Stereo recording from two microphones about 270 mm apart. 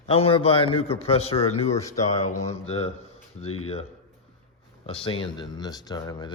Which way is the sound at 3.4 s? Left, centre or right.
Left.